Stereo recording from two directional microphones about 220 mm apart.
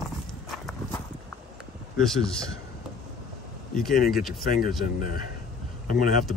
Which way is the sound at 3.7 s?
Centre (ahead or behind).